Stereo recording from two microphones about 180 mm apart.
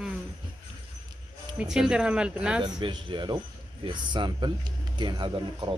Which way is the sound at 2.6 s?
25° right (ahead or behind).